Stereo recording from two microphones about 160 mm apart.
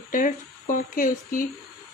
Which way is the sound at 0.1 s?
55° left (ahead or behind).